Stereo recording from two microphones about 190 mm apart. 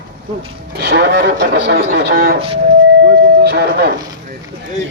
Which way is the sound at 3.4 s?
60° right (ahead or behind).